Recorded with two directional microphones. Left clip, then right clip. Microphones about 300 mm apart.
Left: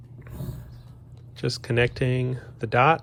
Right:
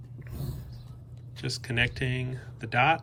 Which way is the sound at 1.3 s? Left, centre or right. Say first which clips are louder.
Left 5 dB; centre.